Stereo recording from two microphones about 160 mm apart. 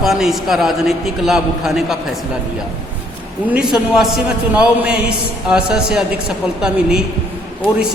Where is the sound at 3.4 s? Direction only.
5° right (ahead or behind).